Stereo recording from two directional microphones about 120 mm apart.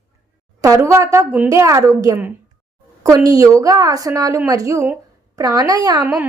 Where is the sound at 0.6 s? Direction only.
25° right (ahead or behind).